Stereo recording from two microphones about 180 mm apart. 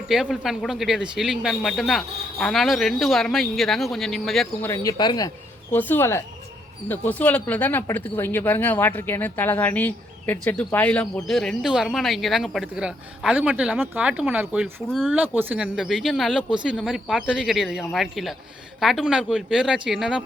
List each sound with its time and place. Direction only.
0.1 s speech: centre (ahead or behind)
4.6 s speech: 15° left (ahead or behind)
5.7 s speech: 10° left (ahead or behind); by 14.7 s 10° right (ahead or behind)
14.8 s speech: 5° left (ahead or behind)
15.4 s speech: 10° right (ahead or behind)